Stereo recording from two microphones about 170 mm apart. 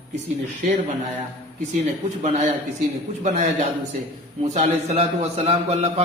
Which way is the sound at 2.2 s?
45° right (ahead or behind).